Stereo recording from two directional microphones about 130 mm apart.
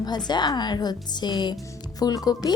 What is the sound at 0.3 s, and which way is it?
A woman's voice, 35° left (ahead or behind).